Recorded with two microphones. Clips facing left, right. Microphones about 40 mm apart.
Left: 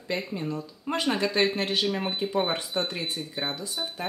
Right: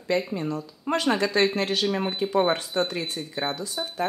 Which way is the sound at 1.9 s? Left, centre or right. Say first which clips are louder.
Right 3 dB; centre.